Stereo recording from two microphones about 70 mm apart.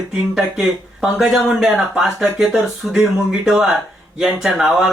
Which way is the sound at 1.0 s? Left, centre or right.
Centre.